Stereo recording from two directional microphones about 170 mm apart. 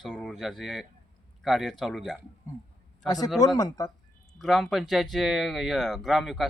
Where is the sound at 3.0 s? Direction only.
20° left (ahead or behind).